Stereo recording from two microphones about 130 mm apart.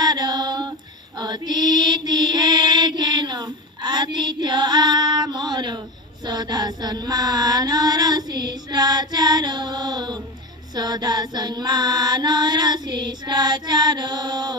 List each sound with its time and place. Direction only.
0.0 s female singing: 30° right (ahead or behind)
10.7 s mantra: 30° right (ahead or behind)